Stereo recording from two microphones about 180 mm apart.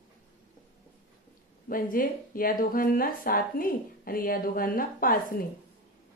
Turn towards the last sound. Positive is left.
turn(degrees=50)  # may be behind; listen again after turning